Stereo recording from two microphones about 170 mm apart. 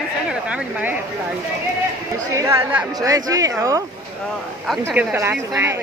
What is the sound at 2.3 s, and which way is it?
A woman's voice, 15° right (ahead or behind).